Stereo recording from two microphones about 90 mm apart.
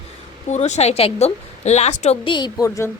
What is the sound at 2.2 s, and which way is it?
Speech, 55° left (ahead or behind).